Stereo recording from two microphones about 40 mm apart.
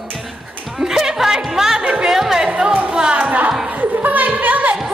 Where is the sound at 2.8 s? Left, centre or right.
Right.